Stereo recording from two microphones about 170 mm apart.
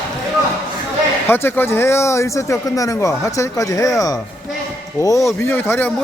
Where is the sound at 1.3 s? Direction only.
15° left (ahead or behind).